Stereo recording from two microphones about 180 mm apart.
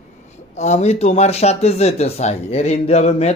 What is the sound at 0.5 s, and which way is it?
Speech, 40° left (ahead or behind).